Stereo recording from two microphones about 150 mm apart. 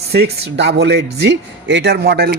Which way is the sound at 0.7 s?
90° right.